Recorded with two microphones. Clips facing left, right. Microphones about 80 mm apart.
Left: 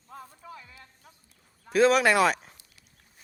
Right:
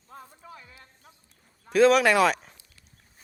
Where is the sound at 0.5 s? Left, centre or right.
Right.